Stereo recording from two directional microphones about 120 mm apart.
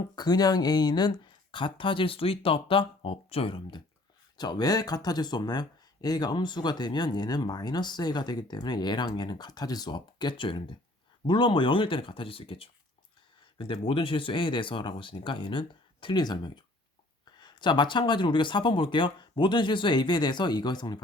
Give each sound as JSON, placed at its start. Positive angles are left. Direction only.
{"t": 0.2, "sound": "speech", "side_deg": 35}
{"t": 4.4, "sound": "speech", "side_deg": 35}